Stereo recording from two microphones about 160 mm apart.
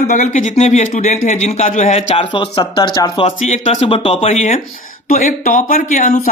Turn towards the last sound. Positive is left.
turn(degrees=55)  # may be behind; listen again after turning